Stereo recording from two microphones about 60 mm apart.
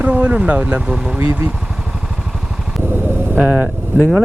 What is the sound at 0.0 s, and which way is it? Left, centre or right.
Speech, right.